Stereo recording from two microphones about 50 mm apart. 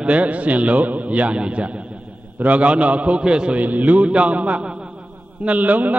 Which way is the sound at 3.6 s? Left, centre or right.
Right.